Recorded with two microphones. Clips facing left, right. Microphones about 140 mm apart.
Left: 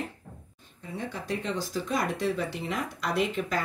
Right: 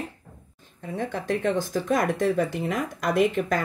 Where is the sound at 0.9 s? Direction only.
50° right (ahead or behind).